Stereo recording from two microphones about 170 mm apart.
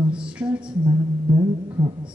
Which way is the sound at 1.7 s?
25° right (ahead or behind).